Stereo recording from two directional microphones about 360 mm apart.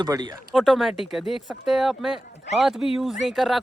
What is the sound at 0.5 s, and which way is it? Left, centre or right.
Speech, centre.